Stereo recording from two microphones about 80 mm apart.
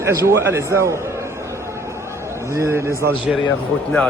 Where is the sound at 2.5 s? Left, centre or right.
Right.